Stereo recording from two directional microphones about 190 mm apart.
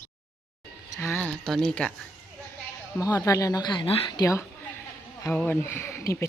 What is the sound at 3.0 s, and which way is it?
A woman's voice, 15° left (ahead or behind).